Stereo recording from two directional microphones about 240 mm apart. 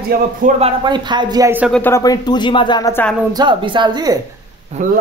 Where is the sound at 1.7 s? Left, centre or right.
Centre.